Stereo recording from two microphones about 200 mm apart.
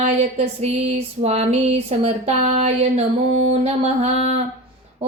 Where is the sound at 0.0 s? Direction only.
30° right (ahead or behind).